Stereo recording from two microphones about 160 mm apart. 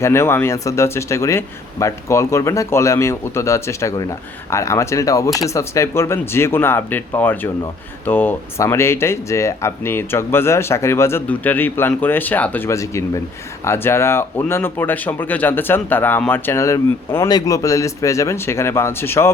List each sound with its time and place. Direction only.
0.0 s speech: 15° left (ahead or behind)